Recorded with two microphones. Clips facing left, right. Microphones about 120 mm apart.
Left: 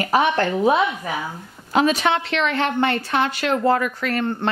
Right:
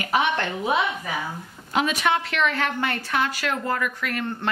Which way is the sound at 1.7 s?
30° left (ahead or behind).